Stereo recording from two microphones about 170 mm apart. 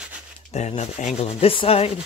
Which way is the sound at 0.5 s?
40° left (ahead or behind).